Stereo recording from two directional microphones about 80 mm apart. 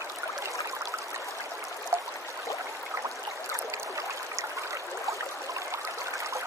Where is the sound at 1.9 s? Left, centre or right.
Right.